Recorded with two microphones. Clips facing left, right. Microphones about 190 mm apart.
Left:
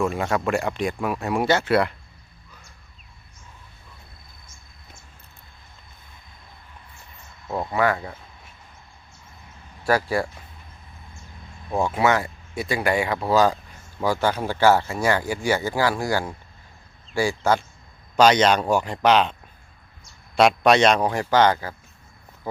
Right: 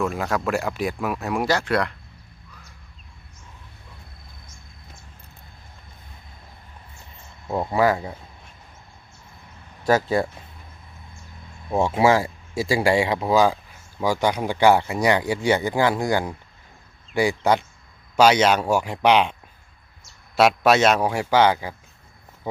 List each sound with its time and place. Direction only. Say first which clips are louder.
0.0 s speech: left 1 dB; centre (ahead or behind)
7.4 s speech: right 2 dB; 15° right (ahead or behind)
9.8 s speech: right 2 dB; 20° right (ahead or behind)
11.7 s speech: right 3 dB; 25° right (ahead or behind)